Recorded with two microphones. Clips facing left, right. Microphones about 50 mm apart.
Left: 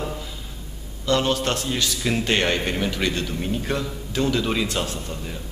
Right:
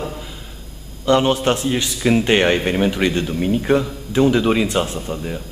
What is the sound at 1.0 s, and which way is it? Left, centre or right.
A man's voice, right.